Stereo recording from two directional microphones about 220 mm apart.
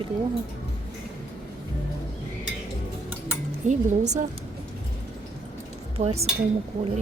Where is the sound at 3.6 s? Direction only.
35° right (ahead or behind).